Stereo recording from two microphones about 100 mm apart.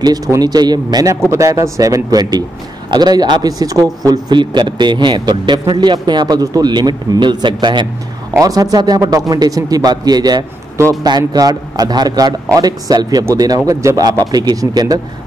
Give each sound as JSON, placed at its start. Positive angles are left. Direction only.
{"t": 0.4, "sound": "speech", "side_deg": -45}
{"t": 1.3, "sound": "a man's voice", "side_deg": -30}
{"t": 8.4, "sound": "a man's voice", "side_deg": -35}